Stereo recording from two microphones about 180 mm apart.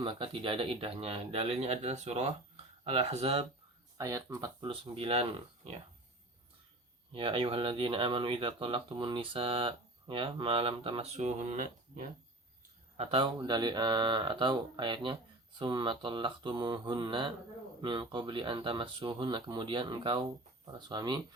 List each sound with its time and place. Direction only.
0.0 s speech: 30° right (ahead or behind)
3.9 s speech: 20° right (ahead or behind)
7.1 s speech: 30° right (ahead or behind); by 12.0 s 50° right (ahead or behind)
13.0 s speech: 30° right (ahead or behind)